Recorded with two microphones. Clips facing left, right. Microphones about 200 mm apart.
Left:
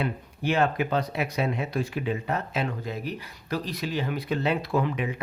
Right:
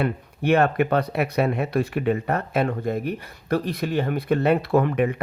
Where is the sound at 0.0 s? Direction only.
60° right (ahead or behind).